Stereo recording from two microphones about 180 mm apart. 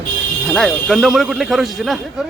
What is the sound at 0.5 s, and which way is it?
Speech, centre (ahead or behind).